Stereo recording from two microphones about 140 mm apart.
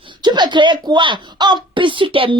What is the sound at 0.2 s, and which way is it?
A woman's voice, 30° right (ahead or behind).